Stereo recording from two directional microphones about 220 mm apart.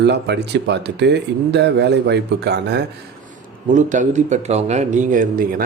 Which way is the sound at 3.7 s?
35° right (ahead or behind).